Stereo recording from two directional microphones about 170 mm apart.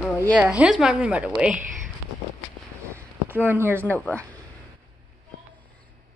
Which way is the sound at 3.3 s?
10° right (ahead or behind).